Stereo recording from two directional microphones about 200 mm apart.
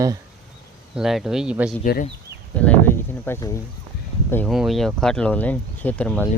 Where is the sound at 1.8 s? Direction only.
45° left (ahead or behind).